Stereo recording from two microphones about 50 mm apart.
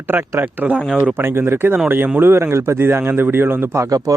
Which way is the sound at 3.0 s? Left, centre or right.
Right.